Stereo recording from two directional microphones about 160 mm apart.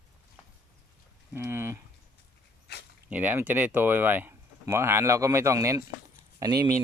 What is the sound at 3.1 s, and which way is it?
Speech, 10° right (ahead or behind).